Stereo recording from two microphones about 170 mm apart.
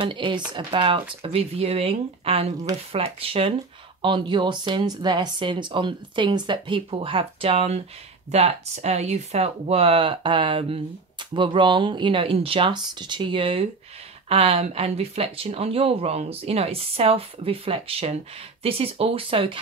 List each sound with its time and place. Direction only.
0.0 s speech: 30° right (ahead or behind)